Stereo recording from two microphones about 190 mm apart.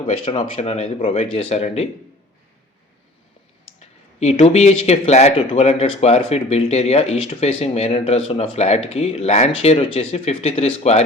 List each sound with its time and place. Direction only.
0.3 s speech: 30° left (ahead or behind)
3.8 s speech: 35° left (ahead or behind)